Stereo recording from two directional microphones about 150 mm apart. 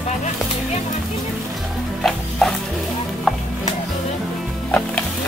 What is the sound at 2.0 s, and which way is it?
Music, centre (ahead or behind).